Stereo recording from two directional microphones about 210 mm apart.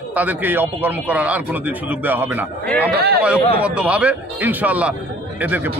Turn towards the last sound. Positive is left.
turn(degrees=-10)  # may be behind; listen again after turning